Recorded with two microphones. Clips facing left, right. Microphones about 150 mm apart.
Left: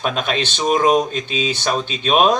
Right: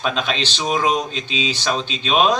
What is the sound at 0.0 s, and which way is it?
A man's voice, 50° left (ahead or behind).